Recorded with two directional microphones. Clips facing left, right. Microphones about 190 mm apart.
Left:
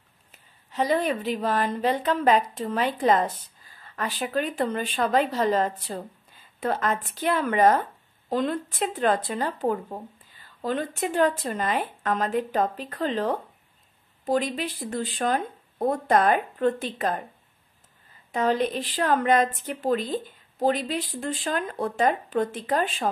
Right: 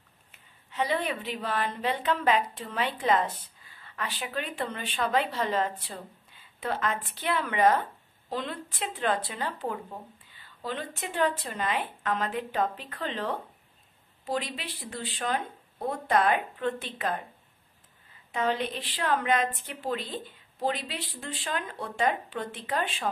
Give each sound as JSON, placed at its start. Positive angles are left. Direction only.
{"t": 0.3, "sound": "speech", "side_deg": 40}
{"t": 18.3, "sound": "speech", "side_deg": 40}